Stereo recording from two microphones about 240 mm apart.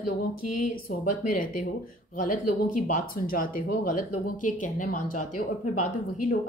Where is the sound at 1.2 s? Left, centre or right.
Left.